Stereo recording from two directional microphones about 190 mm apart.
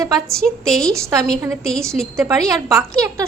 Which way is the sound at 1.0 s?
15° right (ahead or behind).